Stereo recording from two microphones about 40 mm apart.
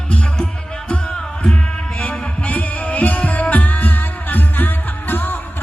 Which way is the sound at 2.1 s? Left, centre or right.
Left.